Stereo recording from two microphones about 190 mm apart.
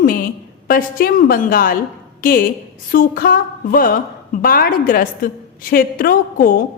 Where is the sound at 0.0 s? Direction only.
50° left (ahead or behind).